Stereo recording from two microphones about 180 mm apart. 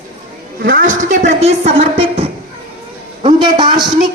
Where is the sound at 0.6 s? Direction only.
50° right (ahead or behind).